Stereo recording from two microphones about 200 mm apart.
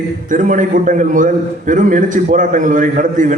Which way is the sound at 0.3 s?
40° right (ahead or behind).